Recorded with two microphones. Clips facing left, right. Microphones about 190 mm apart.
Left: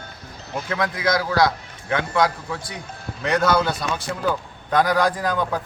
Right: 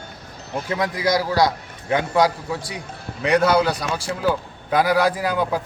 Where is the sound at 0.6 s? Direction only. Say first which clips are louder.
Right 1 dB; 15° right (ahead or behind).